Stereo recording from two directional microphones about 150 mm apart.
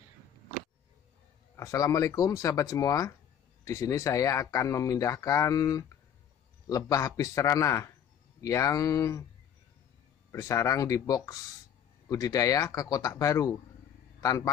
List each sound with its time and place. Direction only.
1.6 s speech: 20° left (ahead or behind)
10.3 s speech: 20° left (ahead or behind)